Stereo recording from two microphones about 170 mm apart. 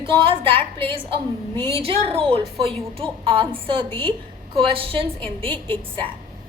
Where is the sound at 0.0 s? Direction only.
30° right (ahead or behind).